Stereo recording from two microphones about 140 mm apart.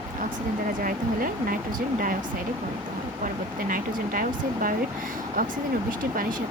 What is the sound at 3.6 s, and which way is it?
Speech, 70° right (ahead or behind).